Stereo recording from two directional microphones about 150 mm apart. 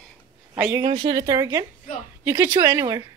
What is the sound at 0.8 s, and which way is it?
Speech, 30° right (ahead or behind).